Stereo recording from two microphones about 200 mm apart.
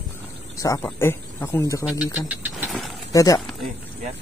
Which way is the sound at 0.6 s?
15° left (ahead or behind).